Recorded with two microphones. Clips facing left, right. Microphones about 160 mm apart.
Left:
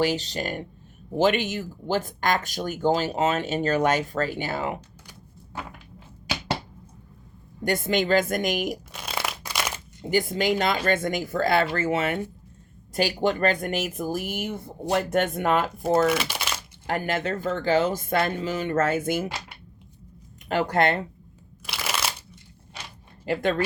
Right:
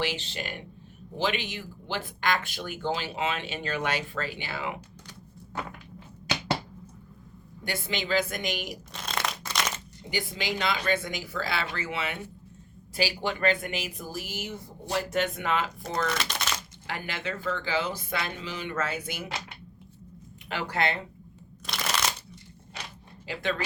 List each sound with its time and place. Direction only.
0.0 s speech: 40° left (ahead or behind)
7.6 s speech: 50° left (ahead or behind)
8.9 s crunch: 10° left (ahead or behind)
10.0 s speech: 50° left (ahead or behind)
16.0 s crumpling: 10° left (ahead or behind)
16.8 s speech: 50° left (ahead or behind)
20.5 s speech: 50° left (ahead or behind)
21.7 s crushing: 5° left (ahead or behind)
23.2 s speech: 50° left (ahead or behind)